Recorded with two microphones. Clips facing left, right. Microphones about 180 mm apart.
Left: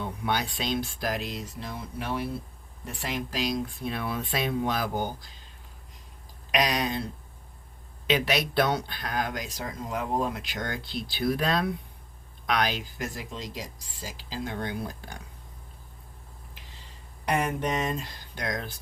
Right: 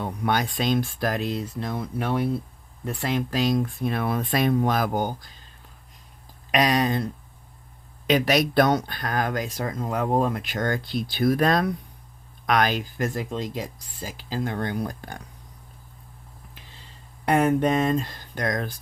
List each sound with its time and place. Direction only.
0.0 s speech: 50° right (ahead or behind)
6.5 s speech: 50° right (ahead or behind)
18.0 s speech: 50° right (ahead or behind)